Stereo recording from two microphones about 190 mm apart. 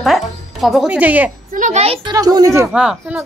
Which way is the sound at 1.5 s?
40° right (ahead or behind).